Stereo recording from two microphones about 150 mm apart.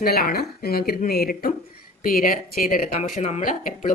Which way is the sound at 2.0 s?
70° left (ahead or behind).